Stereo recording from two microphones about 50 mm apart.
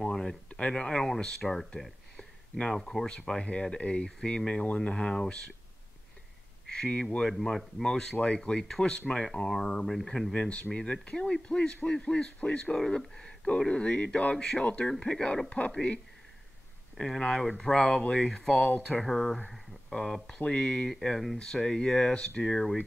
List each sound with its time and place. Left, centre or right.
0.0 s a sound: centre
0.5 s speech: left
2.1 s a sound: centre
3.3 s speech: centre
6.7 s speech: centre
7.2 s speech: centre
10.3 s speech: left
12.7 s speech: centre
14.3 s speech: centre
15.6 s speech: left
16.9 s speech: centre
19.5 s a sound: centre
20.4 s speech: centre
20.9 s speech: centre